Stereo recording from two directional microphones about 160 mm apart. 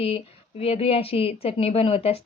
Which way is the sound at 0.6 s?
35° left (ahead or behind).